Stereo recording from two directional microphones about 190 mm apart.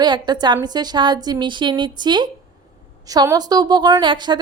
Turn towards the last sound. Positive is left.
turn(degrees=-25)  # may be behind; listen again after turning